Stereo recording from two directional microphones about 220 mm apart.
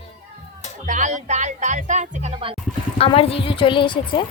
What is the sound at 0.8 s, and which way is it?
Speech, 35° right (ahead or behind).